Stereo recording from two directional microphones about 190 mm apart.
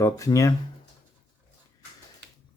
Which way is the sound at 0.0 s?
15° left (ahead or behind).